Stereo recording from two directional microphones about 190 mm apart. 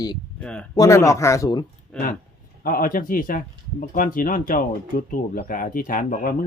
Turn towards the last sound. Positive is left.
turn(degrees=45)  # may be behind; listen again after turning